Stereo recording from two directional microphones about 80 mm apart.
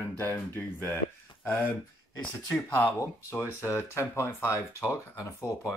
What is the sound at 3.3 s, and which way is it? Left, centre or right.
Speech, left.